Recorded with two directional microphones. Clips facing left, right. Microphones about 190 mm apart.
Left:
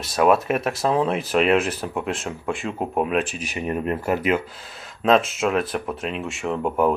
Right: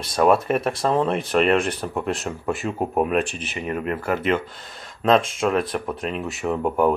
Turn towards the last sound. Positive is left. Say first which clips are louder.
# right 1 dB
turn(degrees=0)  # may be behind; listen again after turning